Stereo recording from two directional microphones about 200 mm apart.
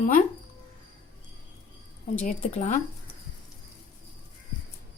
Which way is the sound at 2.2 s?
40° left (ahead or behind).